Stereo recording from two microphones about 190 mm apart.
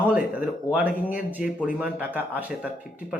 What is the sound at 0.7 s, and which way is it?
Speech, 5° right (ahead or behind).